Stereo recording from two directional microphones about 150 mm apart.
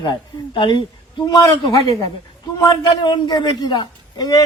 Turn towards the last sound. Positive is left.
turn(degrees=25)  # may be behind; listen again after turning